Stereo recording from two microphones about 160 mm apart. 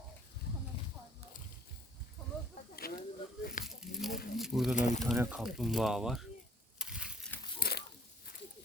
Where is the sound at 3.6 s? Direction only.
Centre (ahead or behind).